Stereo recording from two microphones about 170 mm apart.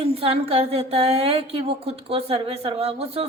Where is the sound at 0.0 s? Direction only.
35° right (ahead or behind).